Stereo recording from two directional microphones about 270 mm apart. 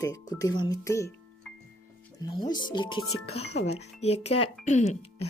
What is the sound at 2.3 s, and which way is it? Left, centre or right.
Speech, centre.